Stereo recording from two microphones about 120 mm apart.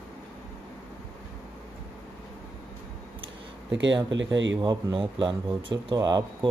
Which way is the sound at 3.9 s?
40° right (ahead or behind).